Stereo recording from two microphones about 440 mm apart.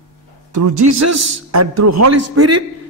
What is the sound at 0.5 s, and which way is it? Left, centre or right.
A man's voice, right.